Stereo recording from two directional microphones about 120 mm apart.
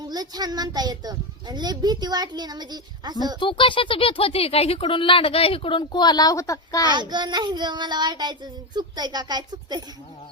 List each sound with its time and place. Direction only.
0.1 s a child's voice: 35° right (ahead or behind)
3.4 s speech: 45° left (ahead or behind); by 6.9 s 30° left (ahead or behind)
6.9 s a child's voice: 40° right (ahead or behind)